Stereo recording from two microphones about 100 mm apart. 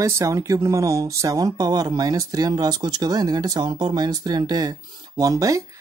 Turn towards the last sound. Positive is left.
turn(degrees=-35)  # may be behind; listen again after turning